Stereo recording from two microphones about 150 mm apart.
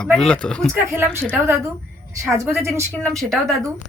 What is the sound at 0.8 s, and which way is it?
Speech, 15° right (ahead or behind).